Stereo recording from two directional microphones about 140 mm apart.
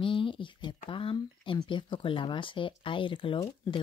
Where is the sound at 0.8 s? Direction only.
35° left (ahead or behind).